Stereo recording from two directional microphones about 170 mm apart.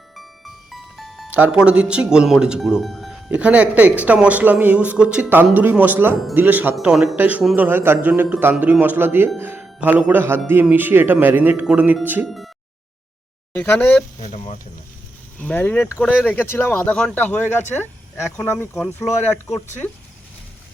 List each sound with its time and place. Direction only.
0.2 s speech: centre (ahead or behind)
13.5 s speech: 10° left (ahead or behind)
14.2 s speech: 45° left (ahead or behind)
15.4 s speech: 10° left (ahead or behind)